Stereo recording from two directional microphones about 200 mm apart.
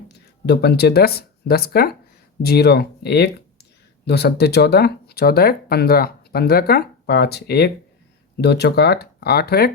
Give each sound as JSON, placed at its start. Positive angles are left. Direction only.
{"t": 0.1, "sound": "speech", "side_deg": 55}